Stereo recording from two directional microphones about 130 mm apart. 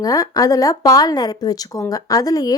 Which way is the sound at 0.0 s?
25° left (ahead or behind).